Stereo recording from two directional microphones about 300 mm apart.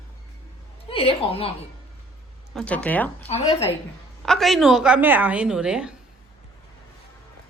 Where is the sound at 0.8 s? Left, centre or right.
Centre.